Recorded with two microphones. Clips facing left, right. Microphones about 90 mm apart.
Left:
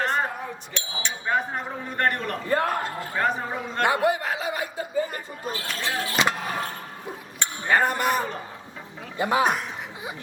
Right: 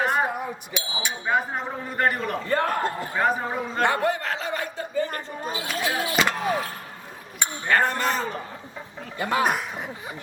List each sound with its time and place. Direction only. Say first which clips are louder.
0.0 s a sound: right 2 dB; 10° right (ahead or behind)
0.7 s speech: right 2 dB; 5° right (ahead or behind)
2.5 s speech: left 1 dB; 10° left (ahead or behind)
3.2 s speech: right 1 dB; 5° right (ahead or behind)
3.8 s speech: left 2 dB; 10° left (ahead or behind)
5.5 s speech: right 2 dB; 10° right (ahead or behind)
7.7 s speech: left 1 dB; 15° left (ahead or behind)
9.4 s speech: right 1 dB; centre (ahead or behind)